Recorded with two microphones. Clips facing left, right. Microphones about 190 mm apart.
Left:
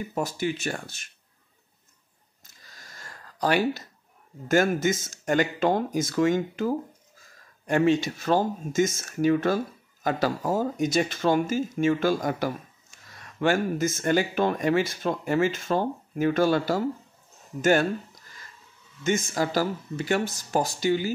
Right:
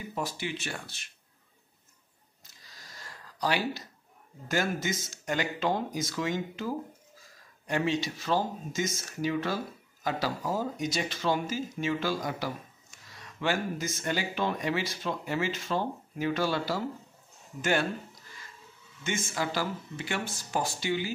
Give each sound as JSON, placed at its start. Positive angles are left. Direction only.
{"t": 0.1, "sound": "speech", "side_deg": 45}
{"t": 2.4, "sound": "a sound", "side_deg": 50}
{"t": 4.5, "sound": "speech", "side_deg": 50}
{"t": 19.0, "sound": "speech", "side_deg": 40}